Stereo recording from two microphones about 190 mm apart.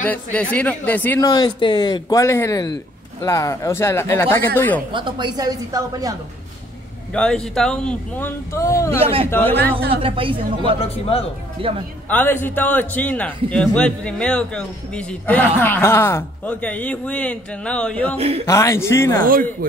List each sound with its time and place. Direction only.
0.0 s a man's voice: 5° left (ahead or behind)
4.9 s a woman's voice: 25° right (ahead or behind)
7.2 s speech: 5° left (ahead or behind)
9.0 s speech: 30° right (ahead or behind)
9.3 s a man's voice: 10° left (ahead or behind)
10.0 s a woman's voice: 30° right (ahead or behind)
12.1 s a man's voice: 10° left (ahead or behind)
18.1 s speech: 30° right (ahead or behind)
18.4 s a man's voice: 15° left (ahead or behind)